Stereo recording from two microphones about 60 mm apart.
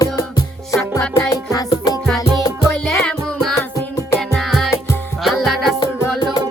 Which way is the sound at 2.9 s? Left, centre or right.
Centre.